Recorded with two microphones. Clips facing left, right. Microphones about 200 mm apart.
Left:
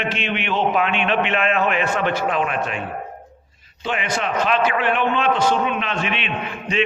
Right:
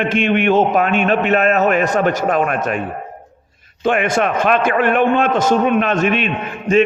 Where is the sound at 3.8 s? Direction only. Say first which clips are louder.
Right 8 dB; 50° right (ahead or behind).